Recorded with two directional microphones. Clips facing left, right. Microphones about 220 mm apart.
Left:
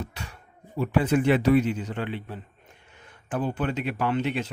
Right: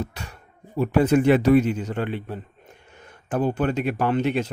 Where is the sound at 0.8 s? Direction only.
40° right (ahead or behind).